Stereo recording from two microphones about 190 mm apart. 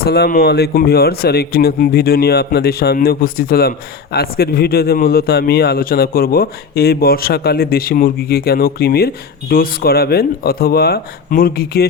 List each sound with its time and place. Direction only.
0.0 s speech: 55° left (ahead or behind)